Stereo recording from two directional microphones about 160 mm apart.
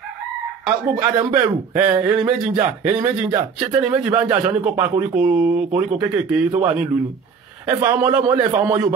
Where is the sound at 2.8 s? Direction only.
10° right (ahead or behind).